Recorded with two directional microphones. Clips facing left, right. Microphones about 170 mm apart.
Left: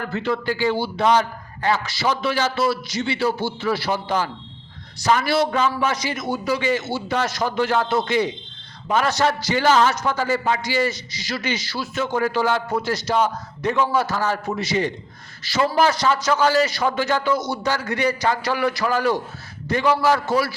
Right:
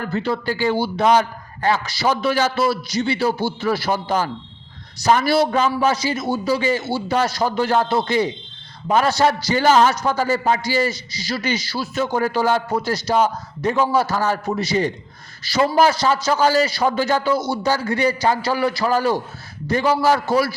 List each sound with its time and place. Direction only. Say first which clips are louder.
0.1 s a man's voice: right 1 dB; 35° right (ahead or behind)